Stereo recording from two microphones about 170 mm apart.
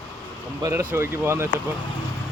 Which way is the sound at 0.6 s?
15° right (ahead or behind).